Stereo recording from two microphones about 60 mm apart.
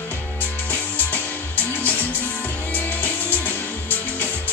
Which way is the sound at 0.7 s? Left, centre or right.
Left.